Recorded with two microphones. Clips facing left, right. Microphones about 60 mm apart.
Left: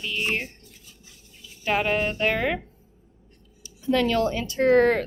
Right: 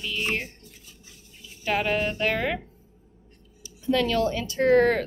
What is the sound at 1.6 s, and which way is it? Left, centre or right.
Speech, left.